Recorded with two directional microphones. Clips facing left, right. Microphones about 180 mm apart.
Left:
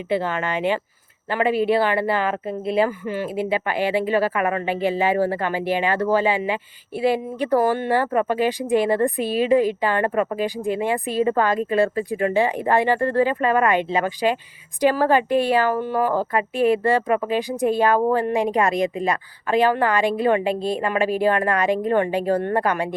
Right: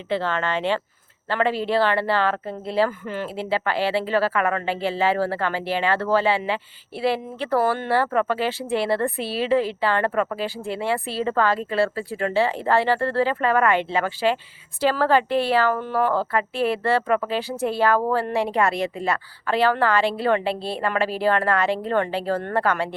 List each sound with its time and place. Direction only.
0.1 s speech: 15° left (ahead or behind)